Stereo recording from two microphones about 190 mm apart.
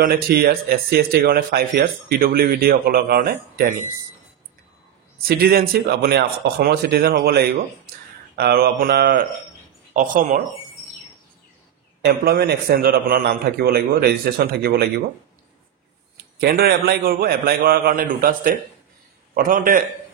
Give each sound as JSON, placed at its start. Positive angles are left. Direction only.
{"t": 0.1, "sound": "speech", "side_deg": -55}
{"t": 5.2, "sound": "a man's voice", "side_deg": -55}
{"t": 12.0, "sound": "a man's voice", "side_deg": -55}
{"t": 16.3, "sound": "speech", "side_deg": -55}